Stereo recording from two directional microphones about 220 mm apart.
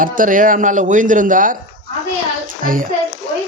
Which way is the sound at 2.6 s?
40° right (ahead or behind).